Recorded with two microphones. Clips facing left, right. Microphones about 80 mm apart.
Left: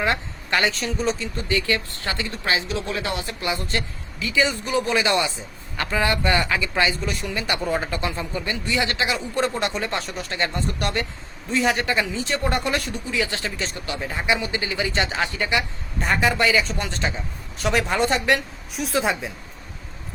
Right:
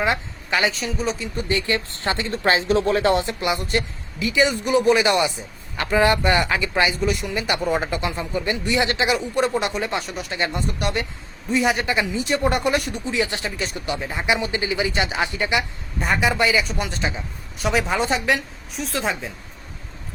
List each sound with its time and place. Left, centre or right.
0.5 s speech: centre
1.2 s speech: right
3.2 s speech: right
7.0 s speech: centre
16.0 s speech: centre